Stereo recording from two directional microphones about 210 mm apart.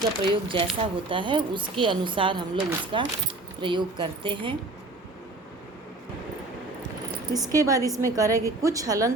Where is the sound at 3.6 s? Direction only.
25° right (ahead or behind).